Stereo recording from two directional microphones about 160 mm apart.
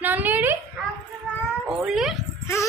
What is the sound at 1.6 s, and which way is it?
Speech, 5° right (ahead or behind).